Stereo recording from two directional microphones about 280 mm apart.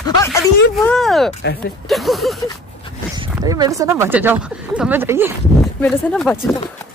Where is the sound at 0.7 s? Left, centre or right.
Centre.